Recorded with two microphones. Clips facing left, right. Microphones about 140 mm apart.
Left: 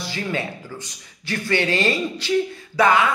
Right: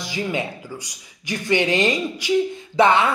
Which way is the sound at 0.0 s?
15° right (ahead or behind).